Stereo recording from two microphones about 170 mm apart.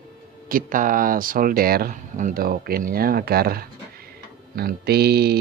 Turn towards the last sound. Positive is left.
turn(degrees=-70)  # may be behind; listen again after turning